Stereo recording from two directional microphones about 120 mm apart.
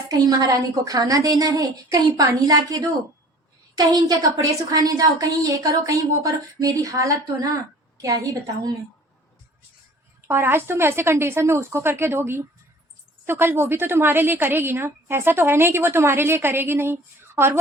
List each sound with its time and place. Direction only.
0.1 s a woman's voice: 30° right (ahead or behind)
10.2 s a woman's voice: 20° right (ahead or behind)